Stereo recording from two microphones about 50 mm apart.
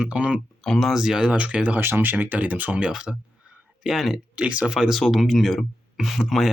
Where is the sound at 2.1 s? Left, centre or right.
Right.